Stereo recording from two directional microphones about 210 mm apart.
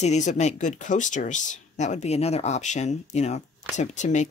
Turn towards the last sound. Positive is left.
turn(degrees=35)  # may be behind; listen again after turning